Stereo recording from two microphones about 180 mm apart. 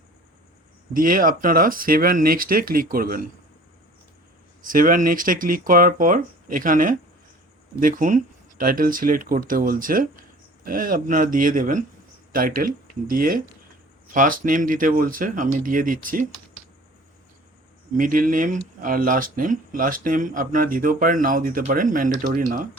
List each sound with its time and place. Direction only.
0.9 s speech: 50° right (ahead or behind)
4.6 s speech: 50° right (ahead or behind)
17.9 s speech: 50° right (ahead or behind)